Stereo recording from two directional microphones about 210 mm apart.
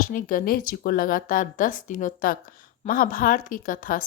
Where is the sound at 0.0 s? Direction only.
40° left (ahead or behind).